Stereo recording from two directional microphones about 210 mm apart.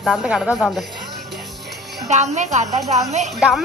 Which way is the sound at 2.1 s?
35° right (ahead or behind).